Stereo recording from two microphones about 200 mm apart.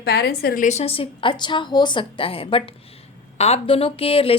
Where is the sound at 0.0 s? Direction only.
50° left (ahead or behind).